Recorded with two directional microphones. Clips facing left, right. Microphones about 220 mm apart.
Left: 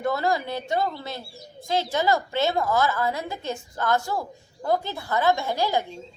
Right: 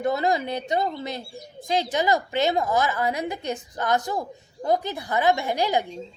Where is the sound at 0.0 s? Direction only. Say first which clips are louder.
Right 1 dB; 20° right (ahead or behind).